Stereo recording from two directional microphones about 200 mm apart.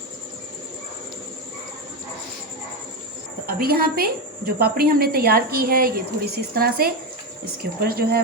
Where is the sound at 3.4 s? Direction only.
50° right (ahead or behind).